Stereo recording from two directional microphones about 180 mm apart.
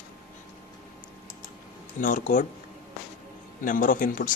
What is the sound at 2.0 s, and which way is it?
Speech, 45° left (ahead or behind).